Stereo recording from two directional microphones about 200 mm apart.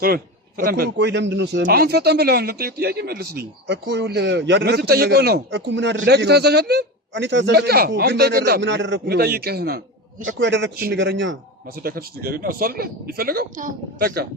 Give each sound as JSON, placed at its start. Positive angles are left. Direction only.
{"t": 0.0, "sound": "a man's voice", "side_deg": -45}
{"t": 1.6, "sound": "a man's voice", "side_deg": -50}
{"t": 10.2, "sound": "a man's voice", "side_deg": -65}
{"t": 11.8, "sound": "a man's voice", "side_deg": -50}